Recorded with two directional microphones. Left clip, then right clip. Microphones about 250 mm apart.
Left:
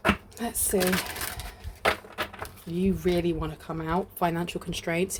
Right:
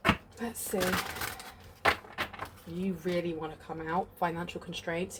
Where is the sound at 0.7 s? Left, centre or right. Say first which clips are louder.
Left 6 dB; left.